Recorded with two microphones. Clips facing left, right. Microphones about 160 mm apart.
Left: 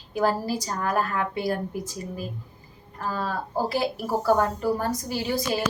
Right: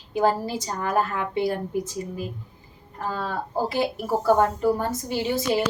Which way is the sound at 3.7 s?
20° right (ahead or behind).